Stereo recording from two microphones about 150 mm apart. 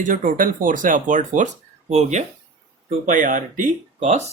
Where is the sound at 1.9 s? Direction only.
50° right (ahead or behind).